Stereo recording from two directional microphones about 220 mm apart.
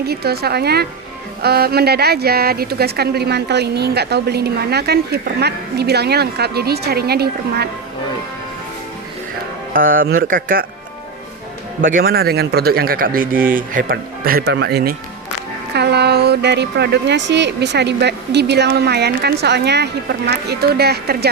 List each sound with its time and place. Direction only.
0.0 s a woman's voice: 45° right (ahead or behind)
9.7 s speech: 40° right (ahead or behind)
11.8 s a woman's voice: 35° right (ahead or behind)